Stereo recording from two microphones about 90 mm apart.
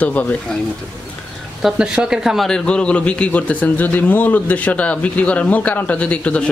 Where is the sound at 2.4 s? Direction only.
10° left (ahead or behind).